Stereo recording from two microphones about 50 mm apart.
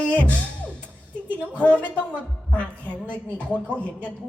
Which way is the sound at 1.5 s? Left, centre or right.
Left.